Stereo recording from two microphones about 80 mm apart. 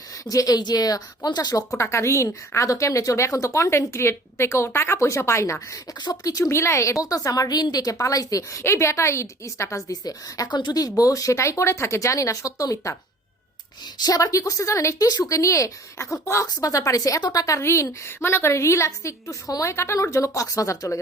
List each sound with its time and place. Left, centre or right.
0.3 s a woman's voice: left
9.9 s a woman's voice: left
10.5 s a woman's voice: left
14.0 s a woman's voice: left